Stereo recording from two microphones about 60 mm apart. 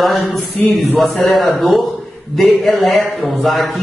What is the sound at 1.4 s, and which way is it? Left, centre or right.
A man's voice, centre.